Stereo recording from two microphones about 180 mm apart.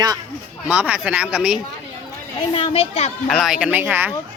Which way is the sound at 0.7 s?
10° right (ahead or behind).